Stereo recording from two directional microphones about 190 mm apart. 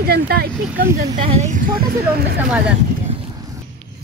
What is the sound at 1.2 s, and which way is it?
Speech, 35° right (ahead or behind).